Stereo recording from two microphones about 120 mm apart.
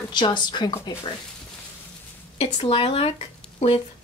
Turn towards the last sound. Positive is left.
turn(degrees=65)  # may be behind; listen again after turning